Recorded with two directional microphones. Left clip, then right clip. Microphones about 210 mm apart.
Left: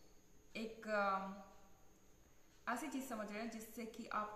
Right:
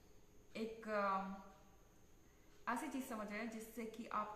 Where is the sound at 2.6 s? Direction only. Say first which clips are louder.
Even; 5° right (ahead or behind).